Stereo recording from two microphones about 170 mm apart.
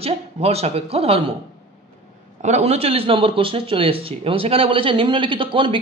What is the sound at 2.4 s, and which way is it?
Speech, 40° right (ahead or behind).